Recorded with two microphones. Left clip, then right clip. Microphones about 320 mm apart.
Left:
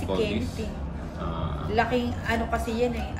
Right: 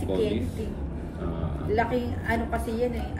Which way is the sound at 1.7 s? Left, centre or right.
Left.